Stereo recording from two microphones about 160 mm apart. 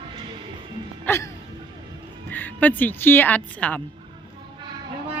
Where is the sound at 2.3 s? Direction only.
10° left (ahead or behind).